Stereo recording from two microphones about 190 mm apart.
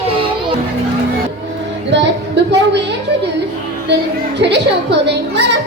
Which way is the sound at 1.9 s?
70° right (ahead or behind).